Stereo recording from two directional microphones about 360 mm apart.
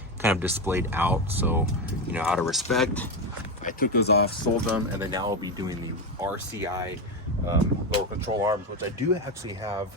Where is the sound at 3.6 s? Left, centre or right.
Left.